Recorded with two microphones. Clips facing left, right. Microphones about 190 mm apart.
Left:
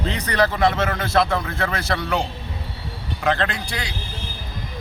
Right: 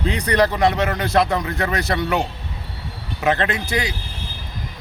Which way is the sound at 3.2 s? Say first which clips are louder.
Right 2 dB; 20° right (ahead or behind).